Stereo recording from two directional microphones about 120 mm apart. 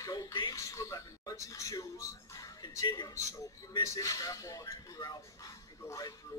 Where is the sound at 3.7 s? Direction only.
25° left (ahead or behind).